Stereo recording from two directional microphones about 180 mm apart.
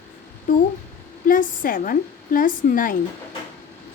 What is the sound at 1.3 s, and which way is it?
Speech, 50° left (ahead or behind).